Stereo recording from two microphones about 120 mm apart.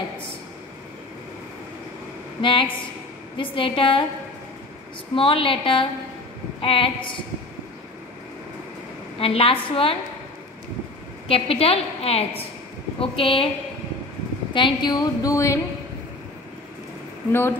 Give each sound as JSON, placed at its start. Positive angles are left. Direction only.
{"t": 2.4, "sound": "a woman's voice", "side_deg": 45}
{"t": 5.1, "sound": "a woman's voice", "side_deg": 50}
{"t": 9.2, "sound": "a woman's voice", "side_deg": 50}
{"t": 11.2, "sound": "a woman's voice", "side_deg": 55}
{"t": 14.5, "sound": "a woman's voice", "side_deg": 40}
{"t": 17.3, "sound": "speech", "side_deg": 20}